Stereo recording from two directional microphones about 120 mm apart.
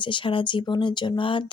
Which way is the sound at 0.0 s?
45° left (ahead or behind).